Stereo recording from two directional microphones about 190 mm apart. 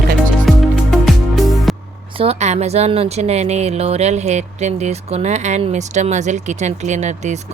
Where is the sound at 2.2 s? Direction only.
35° right (ahead or behind).